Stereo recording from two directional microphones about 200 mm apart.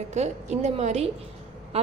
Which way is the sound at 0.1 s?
35° right (ahead or behind).